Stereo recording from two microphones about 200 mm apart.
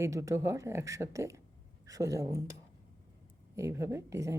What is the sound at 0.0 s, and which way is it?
Speech, 15° right (ahead or behind).